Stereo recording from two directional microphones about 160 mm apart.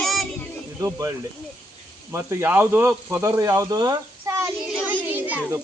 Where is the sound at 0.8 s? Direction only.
20° right (ahead or behind).